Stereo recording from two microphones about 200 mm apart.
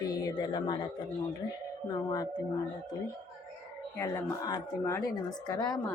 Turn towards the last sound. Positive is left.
turn(degrees=15)  # may be behind; listen again after turning